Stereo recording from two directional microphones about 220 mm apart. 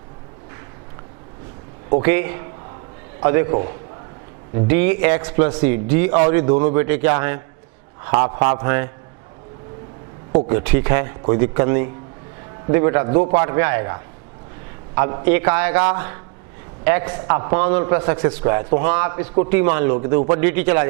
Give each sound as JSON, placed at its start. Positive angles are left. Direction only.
{"t": 2.0, "sound": "a man's voice", "side_deg": -15}
{"t": 4.9, "sound": "a man's voice", "side_deg": -15}
{"t": 10.3, "sound": "a man's voice", "side_deg": -25}
{"t": 20.4, "sound": "a man's voice", "side_deg": -15}